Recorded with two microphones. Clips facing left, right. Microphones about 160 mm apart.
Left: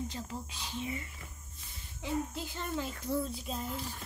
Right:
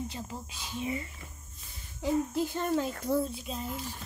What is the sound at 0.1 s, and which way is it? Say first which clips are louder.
Speech: right 1 dB; 5° right (ahead or behind).